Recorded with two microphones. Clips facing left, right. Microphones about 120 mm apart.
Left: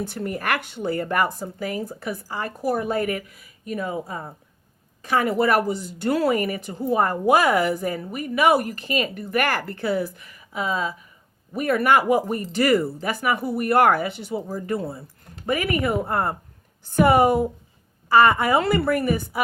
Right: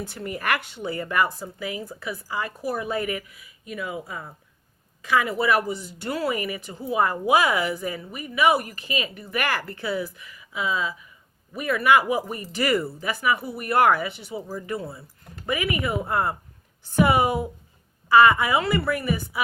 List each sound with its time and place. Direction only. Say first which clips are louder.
0.2 s a woman's voice: even; 45° left (ahead or behind)
0.6 s a woman's voice: left 4 dB; 60° left (ahead or behind)
14.1 s speech: left 6 dB; 60° left (ahead or behind)
14.8 s a woman's voice: left 4 dB; 45° left (ahead or behind)